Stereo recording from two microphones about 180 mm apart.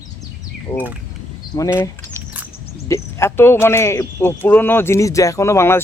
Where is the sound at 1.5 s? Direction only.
20° left (ahead or behind).